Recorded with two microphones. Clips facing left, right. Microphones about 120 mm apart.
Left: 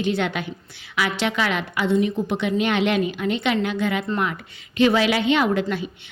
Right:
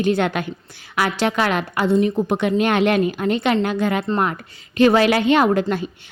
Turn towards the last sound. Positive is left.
turn(degrees=-45)  # may be behind; listen again after turning